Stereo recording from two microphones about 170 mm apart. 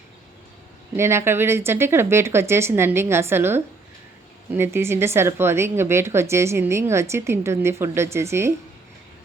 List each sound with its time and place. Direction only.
0.9 s speech: 15° right (ahead or behind)